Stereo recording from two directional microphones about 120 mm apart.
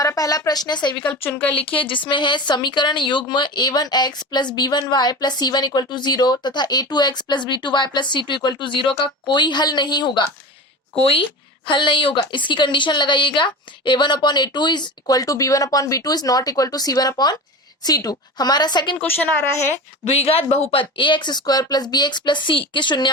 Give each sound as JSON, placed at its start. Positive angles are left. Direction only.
{"t": 0.0, "sound": "a woman's voice", "side_deg": 30}
{"t": 0.9, "sound": "a woman's voice", "side_deg": 15}
{"t": 1.7, "sound": "a woman's voice", "side_deg": 45}
{"t": 11.7, "sound": "a woman's voice", "side_deg": 45}
{"t": 19.0, "sound": "a woman's voice", "side_deg": 20}
{"t": 20.1, "sound": "a woman's voice", "side_deg": 60}